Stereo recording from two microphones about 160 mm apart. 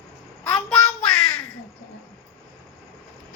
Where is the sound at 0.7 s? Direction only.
5° left (ahead or behind).